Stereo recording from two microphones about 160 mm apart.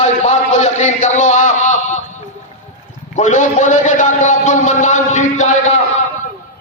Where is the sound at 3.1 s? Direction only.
50° left (ahead or behind).